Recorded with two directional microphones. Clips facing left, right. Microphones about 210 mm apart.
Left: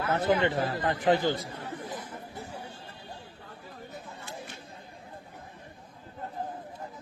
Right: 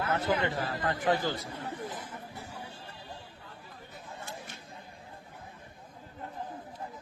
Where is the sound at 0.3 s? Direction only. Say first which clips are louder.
Left 4 dB; 20° left (ahead or behind).